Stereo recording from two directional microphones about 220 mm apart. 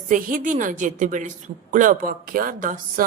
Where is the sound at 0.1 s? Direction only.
40° right (ahead or behind).